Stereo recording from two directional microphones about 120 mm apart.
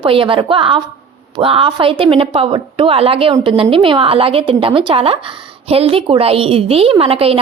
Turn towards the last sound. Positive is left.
turn(degrees=-50)  # may be behind; listen again after turning